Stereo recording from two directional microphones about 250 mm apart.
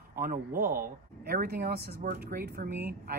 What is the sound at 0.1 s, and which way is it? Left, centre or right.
Speech, right.